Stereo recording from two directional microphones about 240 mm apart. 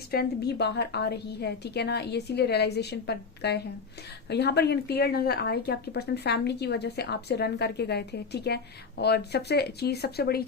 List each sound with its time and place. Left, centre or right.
0.1 s speech: left